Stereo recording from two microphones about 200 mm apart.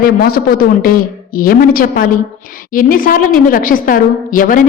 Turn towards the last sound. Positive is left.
turn(degrees=40)  # may be behind; listen again after turning